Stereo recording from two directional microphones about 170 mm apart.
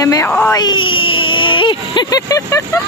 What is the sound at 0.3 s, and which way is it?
Speech, 10° left (ahead or behind).